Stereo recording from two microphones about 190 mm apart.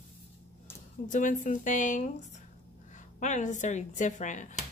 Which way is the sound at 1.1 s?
45° left (ahead or behind).